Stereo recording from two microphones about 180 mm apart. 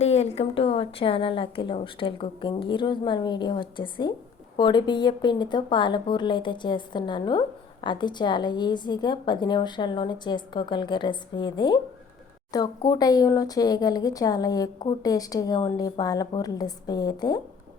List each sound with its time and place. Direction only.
0.0 s a woman's voice: 35° left (ahead or behind)